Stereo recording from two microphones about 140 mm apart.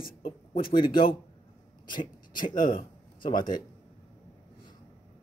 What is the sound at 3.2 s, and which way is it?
Speech, 80° left.